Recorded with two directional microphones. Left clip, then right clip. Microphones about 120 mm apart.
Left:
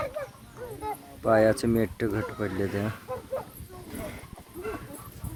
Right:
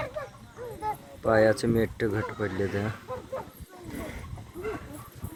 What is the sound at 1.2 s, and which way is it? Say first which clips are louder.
Speech: even; 20° left (ahead or behind).